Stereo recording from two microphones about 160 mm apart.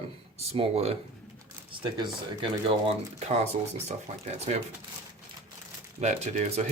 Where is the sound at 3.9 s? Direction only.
45° right (ahead or behind).